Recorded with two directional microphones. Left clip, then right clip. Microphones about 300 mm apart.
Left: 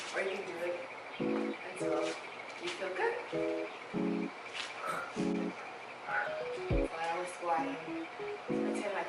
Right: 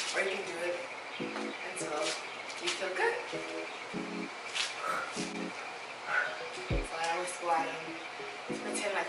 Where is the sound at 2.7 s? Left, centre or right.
Centre.